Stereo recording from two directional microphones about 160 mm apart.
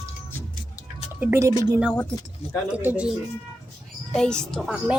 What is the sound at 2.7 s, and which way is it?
Speech, 10° right (ahead or behind).